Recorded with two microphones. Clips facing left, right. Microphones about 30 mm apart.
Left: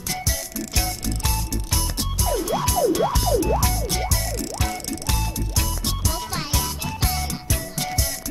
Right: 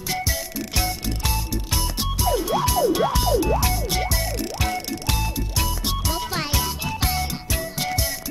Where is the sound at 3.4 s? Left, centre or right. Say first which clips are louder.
Even; centre.